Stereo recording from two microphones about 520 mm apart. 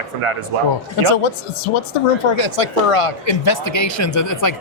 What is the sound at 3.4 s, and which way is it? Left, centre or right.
Speech, left.